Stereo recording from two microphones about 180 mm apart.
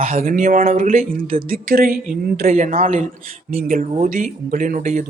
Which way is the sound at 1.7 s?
55° right (ahead or behind).